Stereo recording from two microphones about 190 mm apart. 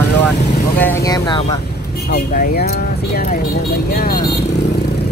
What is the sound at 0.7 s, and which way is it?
Speech, 15° left (ahead or behind).